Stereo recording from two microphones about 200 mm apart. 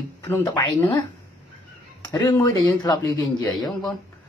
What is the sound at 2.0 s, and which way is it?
Speech, 20° left (ahead or behind).